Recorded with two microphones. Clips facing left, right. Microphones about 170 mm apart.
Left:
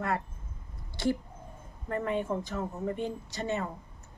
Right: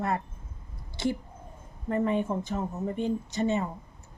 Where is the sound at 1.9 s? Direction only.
20° right (ahead or behind).